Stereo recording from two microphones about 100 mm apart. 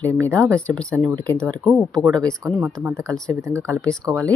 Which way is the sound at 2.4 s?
30° right (ahead or behind).